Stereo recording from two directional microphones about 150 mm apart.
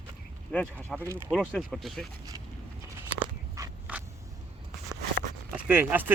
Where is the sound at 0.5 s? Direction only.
10° left (ahead or behind).